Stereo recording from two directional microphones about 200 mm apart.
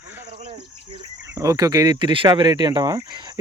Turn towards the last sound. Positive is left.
turn(degrees=-20)  # may be behind; listen again after turning